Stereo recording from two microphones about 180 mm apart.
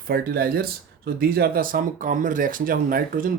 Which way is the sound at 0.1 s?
55° right (ahead or behind).